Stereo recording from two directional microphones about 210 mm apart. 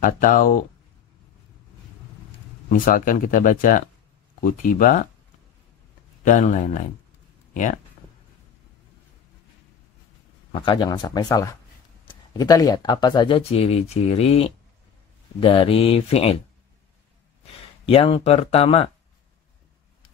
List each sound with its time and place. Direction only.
0.0 s speech: 40° left (ahead or behind)
2.7 s speech: 40° left (ahead or behind)
6.2 s speech: 35° left (ahead or behind)
10.5 s speech: 20° left (ahead or behind)
17.8 s speech: 25° left (ahead or behind)